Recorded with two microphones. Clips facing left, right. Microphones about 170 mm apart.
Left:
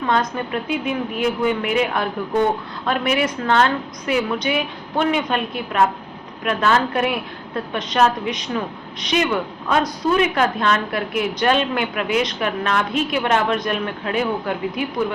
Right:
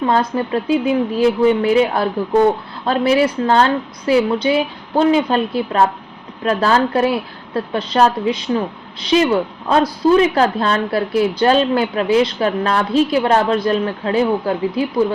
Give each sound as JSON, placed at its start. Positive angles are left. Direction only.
{"t": 0.0, "sound": "a woman's voice", "side_deg": -30}